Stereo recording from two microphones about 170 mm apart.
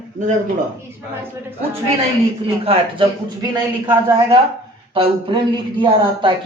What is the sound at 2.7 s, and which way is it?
Speech, 30° right (ahead or behind).